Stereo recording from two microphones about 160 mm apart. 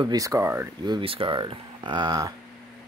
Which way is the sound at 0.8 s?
30° right (ahead or behind).